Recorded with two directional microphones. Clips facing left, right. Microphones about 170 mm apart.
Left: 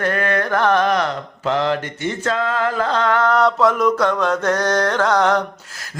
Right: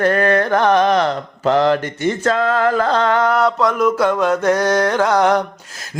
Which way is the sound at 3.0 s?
25° right (ahead or behind).